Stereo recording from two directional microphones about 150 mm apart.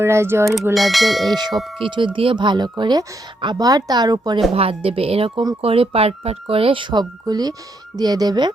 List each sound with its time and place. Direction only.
0.0 s speech: 15° right (ahead or behind)
0.7 s speech: centre (ahead or behind)
1.8 s a woman's voice: 35° right (ahead or behind)
4.5 s speech: 40° right (ahead or behind)
5.3 s a woman's voice: 25° right (ahead or behind)
5.6 s a woman's voice: 40° right (ahead or behind)